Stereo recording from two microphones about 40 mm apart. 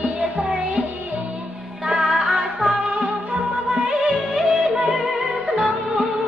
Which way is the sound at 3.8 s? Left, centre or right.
Centre.